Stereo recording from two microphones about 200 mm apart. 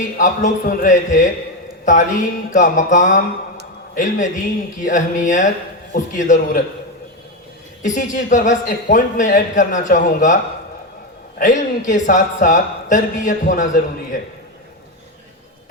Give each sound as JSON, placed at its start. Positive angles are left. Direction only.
{"t": 0.2, "sound": "a man's voice", "side_deg": 40}
{"t": 7.8, "sound": "a man's voice", "side_deg": 40}
{"t": 11.3, "sound": "a man's voice", "side_deg": 40}